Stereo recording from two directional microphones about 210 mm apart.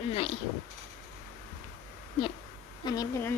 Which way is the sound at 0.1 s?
25° left (ahead or behind).